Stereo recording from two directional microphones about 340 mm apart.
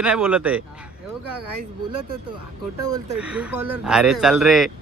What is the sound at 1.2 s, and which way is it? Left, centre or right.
Speech, right.